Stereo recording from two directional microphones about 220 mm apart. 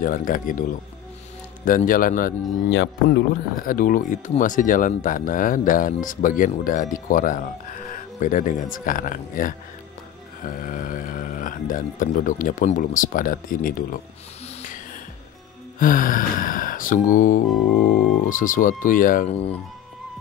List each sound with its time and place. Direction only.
0.0 s speech: 40° left (ahead or behind)
2.7 s speech: 50° left (ahead or behind)
15.8 s speech: 40° left (ahead or behind)